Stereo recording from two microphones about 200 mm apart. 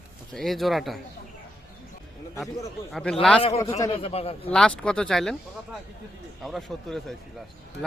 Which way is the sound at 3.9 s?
30° left (ahead or behind).